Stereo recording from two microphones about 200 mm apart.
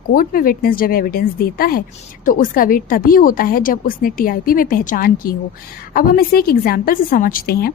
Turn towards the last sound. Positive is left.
turn(degrees=50)  # may be behind; listen again after turning